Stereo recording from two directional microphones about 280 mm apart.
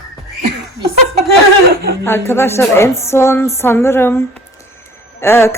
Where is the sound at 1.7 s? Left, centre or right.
Right.